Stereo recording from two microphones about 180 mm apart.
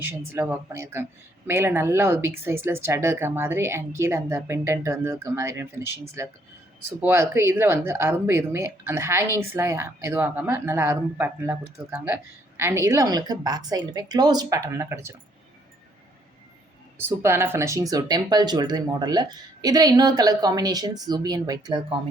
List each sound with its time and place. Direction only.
0.0 s speech: 15° right (ahead or behind)
7.0 s speech: 15° right (ahead or behind)
17.0 s speech: 15° right (ahead or behind)